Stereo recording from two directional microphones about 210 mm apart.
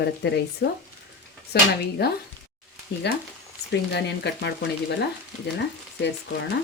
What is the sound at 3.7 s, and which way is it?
Speech, 55° left (ahead or behind).